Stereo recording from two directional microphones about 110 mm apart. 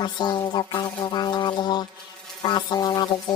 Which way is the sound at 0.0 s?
40° left (ahead or behind).